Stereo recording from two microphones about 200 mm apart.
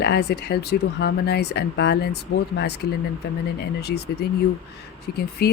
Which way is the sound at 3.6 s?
55° left (ahead or behind).